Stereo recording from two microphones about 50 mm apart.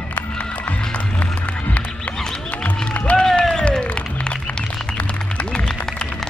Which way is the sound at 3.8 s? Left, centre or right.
Left.